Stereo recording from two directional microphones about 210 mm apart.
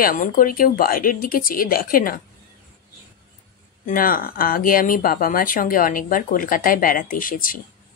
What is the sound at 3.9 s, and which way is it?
Speech, 40° left (ahead or behind).